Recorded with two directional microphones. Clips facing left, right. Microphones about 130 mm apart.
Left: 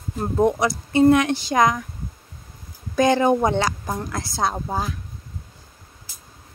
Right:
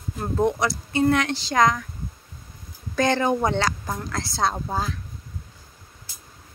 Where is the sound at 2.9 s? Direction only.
15° left (ahead or behind).